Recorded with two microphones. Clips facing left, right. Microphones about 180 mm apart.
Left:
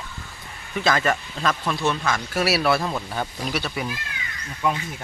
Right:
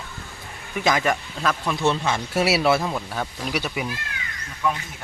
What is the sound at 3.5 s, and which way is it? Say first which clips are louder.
Speech: right 3 dB; 15° right (ahead or behind).